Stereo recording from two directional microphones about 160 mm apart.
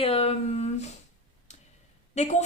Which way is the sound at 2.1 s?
45° left (ahead or behind).